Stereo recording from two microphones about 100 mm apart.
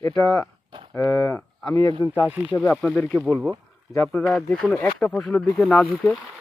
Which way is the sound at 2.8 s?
15° left (ahead or behind).